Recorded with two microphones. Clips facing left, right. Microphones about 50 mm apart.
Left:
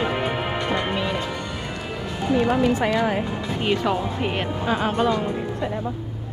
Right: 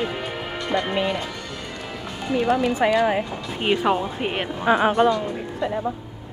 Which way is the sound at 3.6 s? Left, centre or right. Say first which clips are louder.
Right 2 dB; centre.